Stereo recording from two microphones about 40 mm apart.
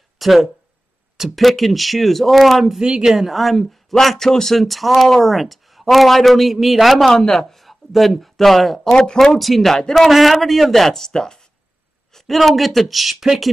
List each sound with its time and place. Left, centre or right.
0.2 s speech: centre
2.8 s speech: centre
7.1 s speech: centre
8.9 s speech: left
9.2 s speech: centre